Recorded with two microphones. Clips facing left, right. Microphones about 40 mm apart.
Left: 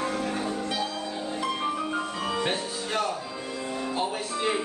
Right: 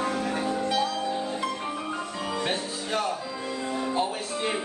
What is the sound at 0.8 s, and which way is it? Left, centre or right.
Music, right.